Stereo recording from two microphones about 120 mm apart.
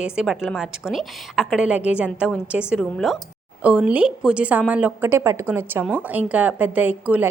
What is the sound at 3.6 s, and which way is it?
A woman's voice, 10° right (ahead or behind).